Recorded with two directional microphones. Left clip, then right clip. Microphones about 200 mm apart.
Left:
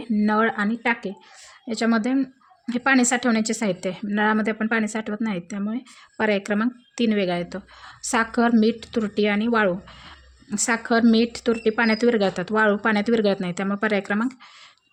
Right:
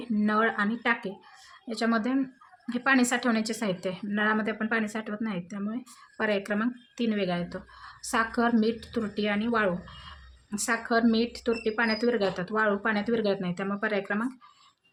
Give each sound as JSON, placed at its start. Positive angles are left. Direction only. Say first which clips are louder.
{"t": 0.0, "sound": "a woman's voice", "louder": "left 5 dB", "side_deg": 30}